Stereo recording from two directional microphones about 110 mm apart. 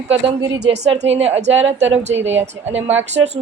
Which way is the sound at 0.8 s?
70° right (ahead or behind).